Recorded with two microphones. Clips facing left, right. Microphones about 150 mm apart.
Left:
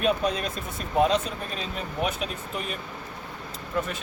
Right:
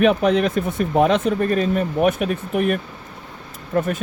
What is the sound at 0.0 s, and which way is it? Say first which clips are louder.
Speech: right 9 dB; 65° right (ahead or behind).